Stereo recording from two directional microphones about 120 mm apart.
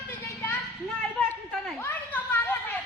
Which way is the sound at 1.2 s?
5° left (ahead or behind).